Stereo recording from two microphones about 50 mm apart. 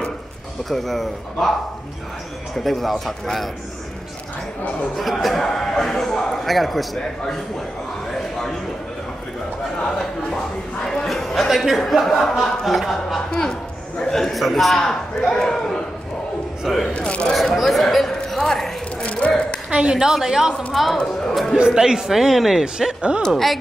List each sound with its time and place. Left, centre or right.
0.7 s a man's voice: centre
2.5 s a man's voice: centre
4.9 s a man's voice: centre
10.9 s a man's voice: centre
13.3 s a man's voice: centre
16.6 s a man's voice: centre
16.9 s speech: left
17.3 s a sound: centre
19.0 s a sound: left
19.7 s speech: centre
21.5 s speech: centre
23.3 s a man's voice: centre